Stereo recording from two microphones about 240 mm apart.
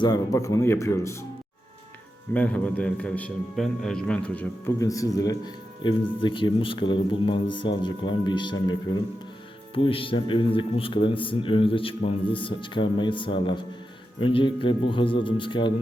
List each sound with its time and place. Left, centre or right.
0.0 s a man's voice: centre
2.3 s a man's voice: centre